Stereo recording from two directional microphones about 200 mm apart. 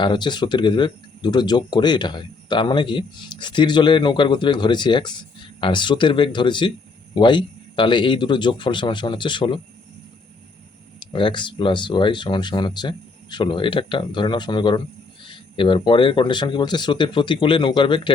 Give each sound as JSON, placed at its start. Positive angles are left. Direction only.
{"t": 0.0, "sound": "speech", "side_deg": 25}
{"t": 11.0, "sound": "speech", "side_deg": 25}